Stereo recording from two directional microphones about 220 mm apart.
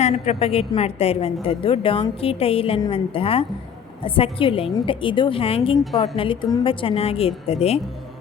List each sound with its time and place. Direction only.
0.0 s a woman's voice: 30° left (ahead or behind)